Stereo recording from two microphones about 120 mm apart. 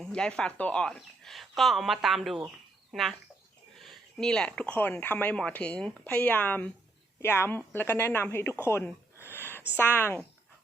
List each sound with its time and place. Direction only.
0.0 s speech: 5° left (ahead or behind)
8.6 s a sound: 20° left (ahead or behind)
9.7 s speech: 15° left (ahead or behind)